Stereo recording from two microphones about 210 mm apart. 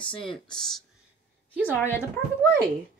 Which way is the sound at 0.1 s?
25° left (ahead or behind).